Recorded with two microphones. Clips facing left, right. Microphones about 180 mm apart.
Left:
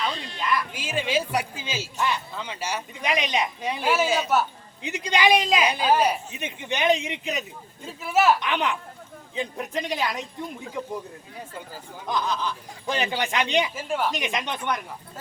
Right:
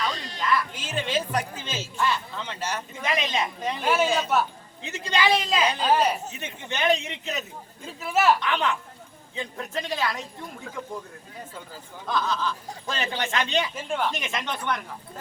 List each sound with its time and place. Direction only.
0.3 s speech: 15° left (ahead or behind)
4.8 s speech: 15° left (ahead or behind)
7.8 s speech: centre (ahead or behind)
8.4 s speech: 15° left (ahead or behind)
12.0 s speech: 15° left (ahead or behind)
13.7 s speech: 5° left (ahead or behind)
14.1 s speech: 15° left (ahead or behind)